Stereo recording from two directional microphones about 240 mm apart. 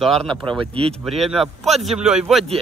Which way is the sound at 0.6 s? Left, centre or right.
Right.